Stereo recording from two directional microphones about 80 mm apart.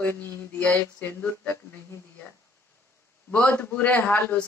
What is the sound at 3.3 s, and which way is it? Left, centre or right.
Speech, centre.